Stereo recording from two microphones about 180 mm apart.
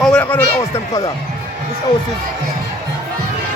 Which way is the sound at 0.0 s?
5° left (ahead or behind).